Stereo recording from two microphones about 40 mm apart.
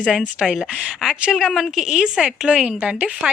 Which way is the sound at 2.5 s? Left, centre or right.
Right.